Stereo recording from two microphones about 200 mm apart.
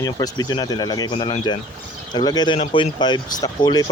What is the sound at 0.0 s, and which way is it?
Speech, 20° left (ahead or behind).